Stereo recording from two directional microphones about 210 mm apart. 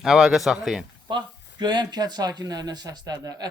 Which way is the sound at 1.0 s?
20° right (ahead or behind).